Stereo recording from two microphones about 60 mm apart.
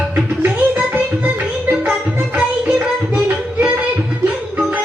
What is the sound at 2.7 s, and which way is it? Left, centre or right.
Music, right.